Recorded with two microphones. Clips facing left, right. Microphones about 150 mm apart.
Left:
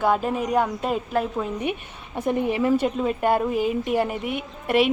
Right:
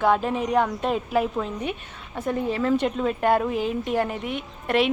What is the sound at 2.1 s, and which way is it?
A woman's voice, 15° left (ahead or behind).